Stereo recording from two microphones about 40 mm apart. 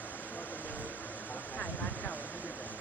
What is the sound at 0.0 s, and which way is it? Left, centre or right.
Vehicle, left.